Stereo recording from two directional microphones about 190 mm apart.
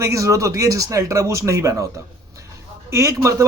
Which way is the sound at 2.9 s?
15° right (ahead or behind).